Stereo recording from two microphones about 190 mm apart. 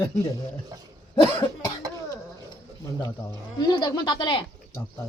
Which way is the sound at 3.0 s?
20° left (ahead or behind).